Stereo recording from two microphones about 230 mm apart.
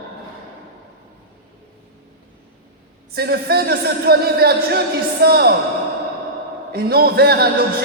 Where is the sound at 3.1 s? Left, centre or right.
Right.